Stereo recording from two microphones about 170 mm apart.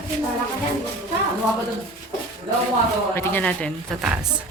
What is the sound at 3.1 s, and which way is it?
Speech, 10° left (ahead or behind).